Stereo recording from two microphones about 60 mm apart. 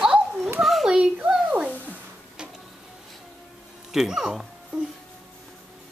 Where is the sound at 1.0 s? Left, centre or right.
Centre.